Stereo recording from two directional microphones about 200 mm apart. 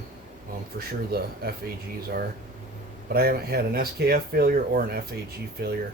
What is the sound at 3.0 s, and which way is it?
Speech, 50° right (ahead or behind).